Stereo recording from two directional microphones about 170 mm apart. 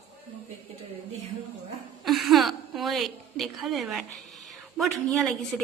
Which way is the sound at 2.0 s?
Centre (ahead or behind).